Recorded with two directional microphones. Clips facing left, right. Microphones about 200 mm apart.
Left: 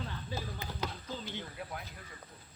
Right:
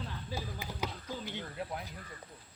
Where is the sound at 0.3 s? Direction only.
10° right (ahead or behind).